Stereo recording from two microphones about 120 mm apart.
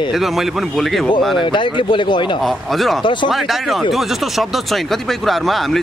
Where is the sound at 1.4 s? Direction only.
40° left (ahead or behind).